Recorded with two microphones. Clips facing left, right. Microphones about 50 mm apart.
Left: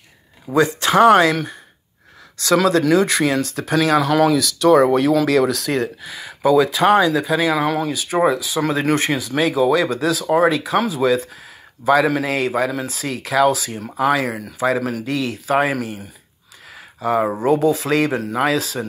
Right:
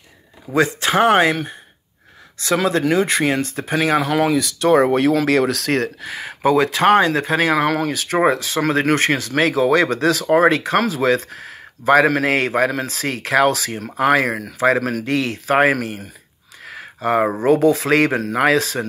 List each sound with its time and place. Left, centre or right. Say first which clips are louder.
0.6 s speech: left 2 dB; right
6.5 s speech: even; right
8.3 s speech: right 1 dB; right
8.5 s speech: right 1 dB; right
9.7 s speech: right 2 dB; right
13.9 s speech: right 2 dB; right
16.6 s a sound: right 1 dB; right
17.4 s speech: right 2 dB; right